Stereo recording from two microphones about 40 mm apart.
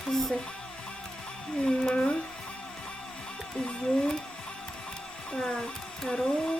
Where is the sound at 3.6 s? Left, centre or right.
Left.